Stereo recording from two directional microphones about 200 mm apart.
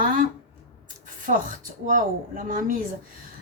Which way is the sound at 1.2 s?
40° right (ahead or behind).